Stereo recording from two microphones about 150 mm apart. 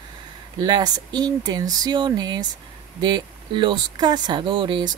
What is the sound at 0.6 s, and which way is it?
Speech, 25° right (ahead or behind).